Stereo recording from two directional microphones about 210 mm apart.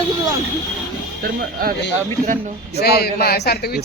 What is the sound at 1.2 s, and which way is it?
Speech, 45° right (ahead or behind).